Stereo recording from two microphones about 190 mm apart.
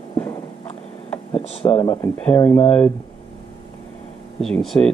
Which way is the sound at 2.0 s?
10° left (ahead or behind).